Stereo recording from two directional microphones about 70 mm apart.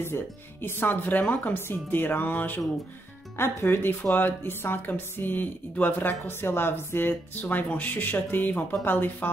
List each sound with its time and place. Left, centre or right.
0.0 s a woman's voice: left